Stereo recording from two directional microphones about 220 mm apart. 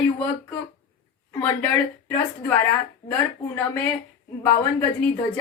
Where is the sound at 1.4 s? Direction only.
5° left (ahead or behind).